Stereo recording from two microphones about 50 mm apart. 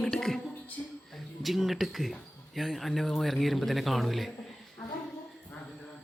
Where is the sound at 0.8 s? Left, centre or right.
Left.